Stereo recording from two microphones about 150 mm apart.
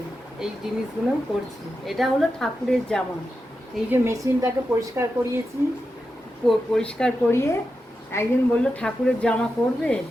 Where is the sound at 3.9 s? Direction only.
20° right (ahead or behind).